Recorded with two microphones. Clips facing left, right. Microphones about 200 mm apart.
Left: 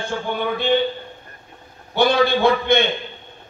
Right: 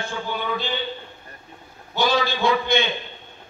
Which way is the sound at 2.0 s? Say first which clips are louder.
Left 5 dB; 55° left (ahead or behind).